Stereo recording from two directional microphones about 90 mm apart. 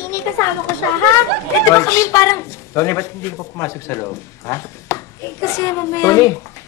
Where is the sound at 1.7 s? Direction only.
35° left (ahead or behind).